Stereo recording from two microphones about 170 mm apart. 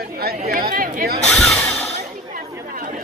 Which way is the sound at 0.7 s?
55° right (ahead or behind).